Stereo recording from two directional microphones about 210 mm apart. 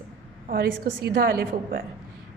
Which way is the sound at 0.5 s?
45° right (ahead or behind).